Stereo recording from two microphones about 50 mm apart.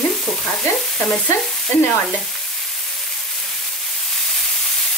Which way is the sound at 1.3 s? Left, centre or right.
Left.